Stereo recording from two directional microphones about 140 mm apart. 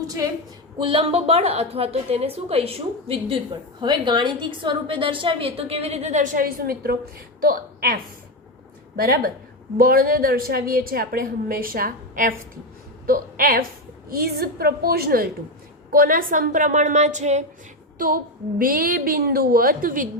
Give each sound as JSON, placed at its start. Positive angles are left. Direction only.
{"t": 0.8, "sound": "a woman's voice", "side_deg": -40}
{"t": 9.0, "sound": "a woman's voice", "side_deg": -90}
{"t": 17.9, "sound": "a sound", "side_deg": -80}
{"t": 18.6, "sound": "a woman's voice", "side_deg": -90}